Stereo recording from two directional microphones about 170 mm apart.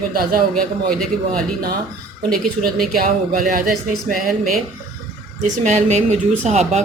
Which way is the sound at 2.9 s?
55° right (ahead or behind).